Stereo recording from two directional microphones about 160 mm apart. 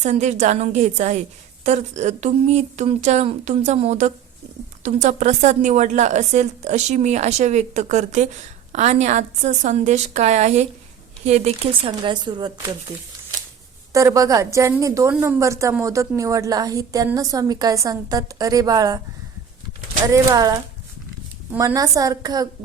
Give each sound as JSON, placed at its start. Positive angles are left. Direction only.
{"t": 0.0, "sound": "a woman's voice", "side_deg": -45}
{"t": 13.9, "sound": "a woman's voice", "side_deg": -20}
{"t": 20.1, "sound": "a woman's voice", "side_deg": -20}
{"t": 21.6, "sound": "a woman's voice", "side_deg": -20}